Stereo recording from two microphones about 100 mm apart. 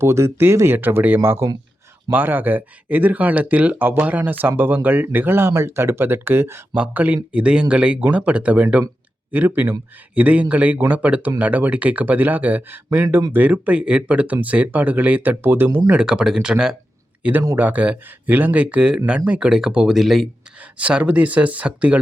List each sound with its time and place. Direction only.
0.0 s speech: 30° right (ahead or behind)
10.2 s speech: 15° right (ahead or behind)
15.9 s speech: 10° right (ahead or behind)
20.6 s speech: 15° right (ahead or behind)